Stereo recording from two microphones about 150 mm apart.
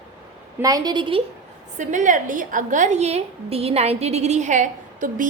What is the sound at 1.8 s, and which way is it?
A woman's voice, 55° right (ahead or behind).